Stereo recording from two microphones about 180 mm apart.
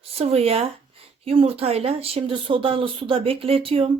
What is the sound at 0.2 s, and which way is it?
Speech, 35° right (ahead or behind).